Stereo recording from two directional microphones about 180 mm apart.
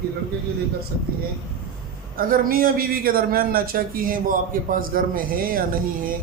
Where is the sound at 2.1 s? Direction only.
50° right (ahead or behind).